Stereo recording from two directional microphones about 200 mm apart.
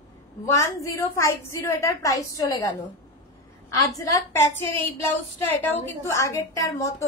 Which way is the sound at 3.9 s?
15° left (ahead or behind).